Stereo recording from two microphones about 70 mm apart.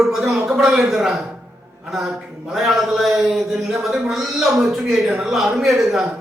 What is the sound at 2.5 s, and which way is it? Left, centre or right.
A man's voice, centre.